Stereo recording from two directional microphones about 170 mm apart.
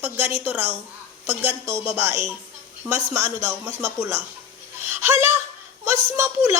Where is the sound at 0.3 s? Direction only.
15° right (ahead or behind).